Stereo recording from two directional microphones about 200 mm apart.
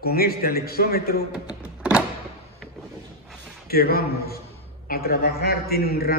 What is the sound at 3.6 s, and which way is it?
A man's voice, 50° left (ahead or behind).